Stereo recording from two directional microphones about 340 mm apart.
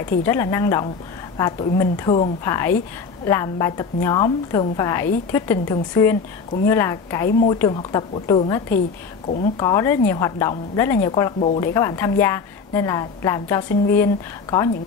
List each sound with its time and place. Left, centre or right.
0.2 s a woman's voice: centre
7.2 s a woman's voice: left